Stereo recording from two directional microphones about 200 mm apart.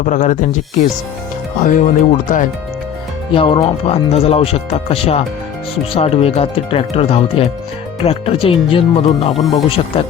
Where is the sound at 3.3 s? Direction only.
25° left (ahead or behind).